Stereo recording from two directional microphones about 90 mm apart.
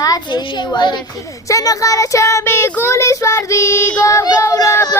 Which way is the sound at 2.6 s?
20° left (ahead or behind).